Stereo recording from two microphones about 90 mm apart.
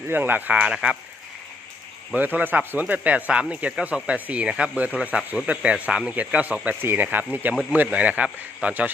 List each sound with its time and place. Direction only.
0.1 s speech: 20° right (ahead or behind)
2.1 s speech: 20° right (ahead or behind)